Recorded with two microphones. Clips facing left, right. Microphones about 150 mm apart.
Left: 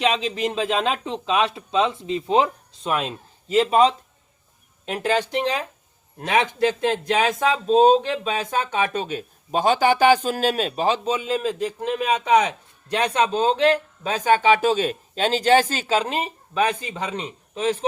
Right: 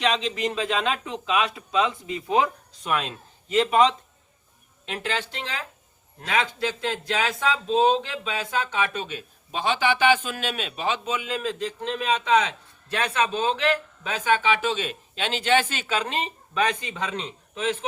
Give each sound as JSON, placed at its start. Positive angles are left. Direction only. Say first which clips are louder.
{"t": 0.1, "sound": "speech", "louder": "left 2 dB", "side_deg": 5}
{"t": 0.5, "sound": "a man's voice", "louder": "left 3 dB", "side_deg": 30}
{"t": 5.2, "sound": "a man's voice", "louder": "left 10 dB", "side_deg": 15}
{"t": 7.5, "sound": "a man's voice", "louder": "left 6 dB", "side_deg": 45}
{"t": 11.4, "sound": "a man's voice", "louder": "left 4 dB", "side_deg": 10}
{"t": 14.0, "sound": "a man's voice", "louder": "left 5 dB", "side_deg": 40}
{"t": 16.0, "sound": "a man's voice", "louder": "left 3 dB", "side_deg": 10}
{"t": 17.5, "sound": "speech", "louder": "left 4 dB", "side_deg": 35}